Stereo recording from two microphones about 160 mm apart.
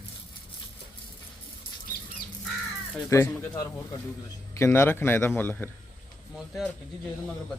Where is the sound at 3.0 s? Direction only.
15° left (ahead or behind).